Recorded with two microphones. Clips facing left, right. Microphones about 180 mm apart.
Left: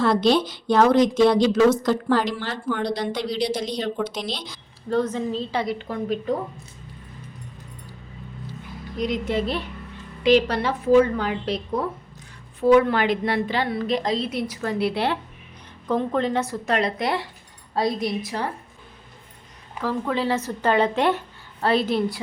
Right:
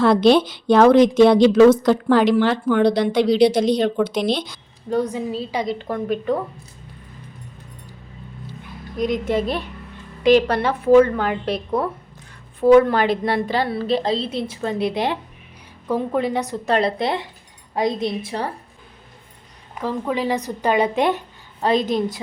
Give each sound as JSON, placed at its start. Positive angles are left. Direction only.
{"t": 0.0, "sound": "speech", "side_deg": -60}
{"t": 4.9, "sound": "a woman's voice", "side_deg": -15}
{"t": 5.9, "sound": "speech", "side_deg": -55}
{"t": 9.0, "sound": "a woman's voice", "side_deg": -50}
{"t": 12.5, "sound": "a woman's voice", "side_deg": -45}
{"t": 16.6, "sound": "a woman's voice", "side_deg": -30}
{"t": 19.8, "sound": "a woman's voice", "side_deg": -15}